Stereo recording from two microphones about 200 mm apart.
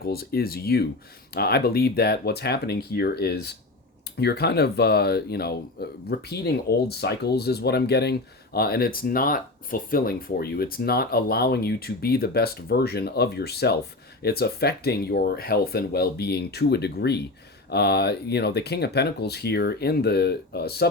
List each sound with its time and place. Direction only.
0.0 s speech: 50° left (ahead or behind)